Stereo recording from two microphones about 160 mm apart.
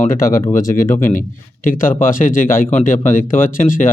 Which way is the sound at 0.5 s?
60° left (ahead or behind).